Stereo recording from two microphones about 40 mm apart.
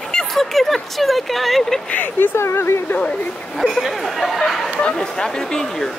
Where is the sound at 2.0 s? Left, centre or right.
Left.